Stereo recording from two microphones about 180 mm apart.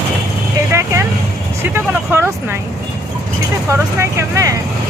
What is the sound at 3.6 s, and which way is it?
Speech, 15° right (ahead or behind).